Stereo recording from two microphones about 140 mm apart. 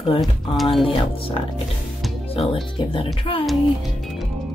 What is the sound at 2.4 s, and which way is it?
Speech, 45° left (ahead or behind).